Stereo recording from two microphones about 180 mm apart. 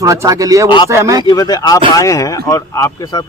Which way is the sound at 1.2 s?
20° left (ahead or behind).